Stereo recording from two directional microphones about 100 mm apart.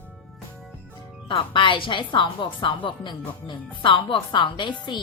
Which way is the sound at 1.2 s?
60° left (ahead or behind).